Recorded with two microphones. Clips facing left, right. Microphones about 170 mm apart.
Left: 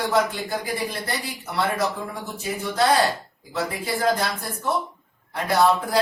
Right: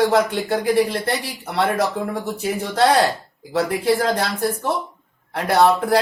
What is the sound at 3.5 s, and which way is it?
A man's voice, 70° right (ahead or behind).